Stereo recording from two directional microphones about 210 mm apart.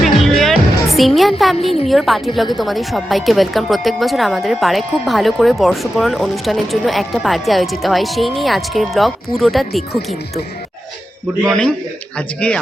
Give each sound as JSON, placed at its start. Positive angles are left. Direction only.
{"t": 0.0, "sound": "music", "side_deg": 0}
{"t": 1.9, "sound": "a woman's voice", "side_deg": 0}
{"t": 11.4, "sound": "a woman's voice", "side_deg": 5}